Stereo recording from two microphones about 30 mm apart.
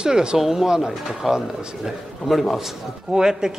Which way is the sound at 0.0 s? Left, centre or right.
Right.